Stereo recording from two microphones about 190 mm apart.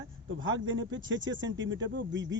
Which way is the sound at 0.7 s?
85° right.